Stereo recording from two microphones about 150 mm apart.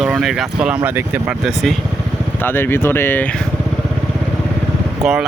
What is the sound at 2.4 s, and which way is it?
Speech, 15° left (ahead or behind).